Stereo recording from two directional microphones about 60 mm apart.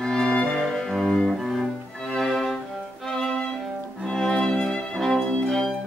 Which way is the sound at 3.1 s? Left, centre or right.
Centre.